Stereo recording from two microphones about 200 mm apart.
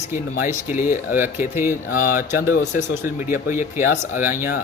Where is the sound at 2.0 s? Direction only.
45° left (ahead or behind).